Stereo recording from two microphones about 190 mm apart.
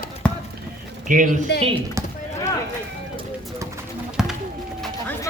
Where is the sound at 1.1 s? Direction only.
45° right (ahead or behind).